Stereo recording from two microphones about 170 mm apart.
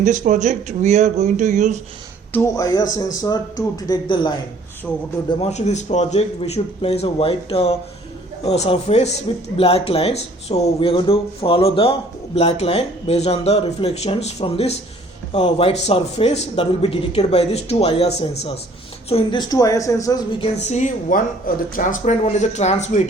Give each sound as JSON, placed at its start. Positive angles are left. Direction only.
{"t": 0.0, "sound": "speech", "side_deg": -45}
{"t": 2.3, "sound": "a woman's voice", "side_deg": 20}
{"t": 3.8, "sound": "a woman's voice", "side_deg": 25}
{"t": 5.3, "sound": "a woman's voice", "side_deg": 40}
{"t": 20.4, "sound": "speech", "side_deg": 40}